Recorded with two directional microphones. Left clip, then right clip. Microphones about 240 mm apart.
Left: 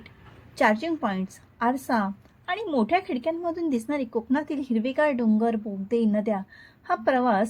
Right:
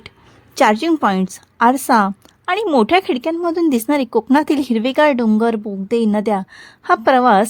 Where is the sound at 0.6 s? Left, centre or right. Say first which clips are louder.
Right 9 dB; right.